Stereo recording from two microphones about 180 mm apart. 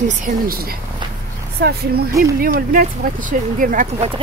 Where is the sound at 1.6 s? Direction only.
60° right (ahead or behind).